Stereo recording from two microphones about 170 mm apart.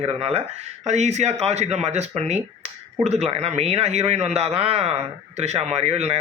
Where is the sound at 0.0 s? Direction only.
35° right (ahead or behind).